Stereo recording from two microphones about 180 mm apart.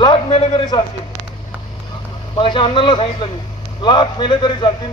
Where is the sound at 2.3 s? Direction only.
25° left (ahead or behind).